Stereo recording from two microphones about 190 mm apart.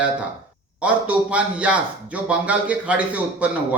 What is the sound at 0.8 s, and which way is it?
A man's voice, 5° right (ahead or behind).